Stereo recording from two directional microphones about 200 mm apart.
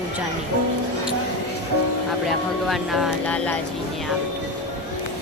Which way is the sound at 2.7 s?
Centre (ahead or behind).